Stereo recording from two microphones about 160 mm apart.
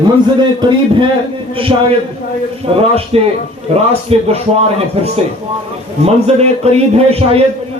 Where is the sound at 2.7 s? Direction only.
35° right (ahead or behind).